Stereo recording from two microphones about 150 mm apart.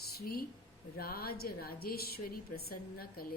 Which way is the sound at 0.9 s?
90° left.